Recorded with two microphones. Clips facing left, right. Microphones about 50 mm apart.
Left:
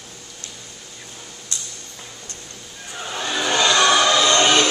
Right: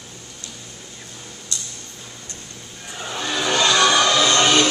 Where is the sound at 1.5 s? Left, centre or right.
Left.